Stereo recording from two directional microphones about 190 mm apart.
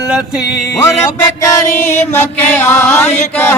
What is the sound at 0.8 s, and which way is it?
Chant, 15° left (ahead or behind).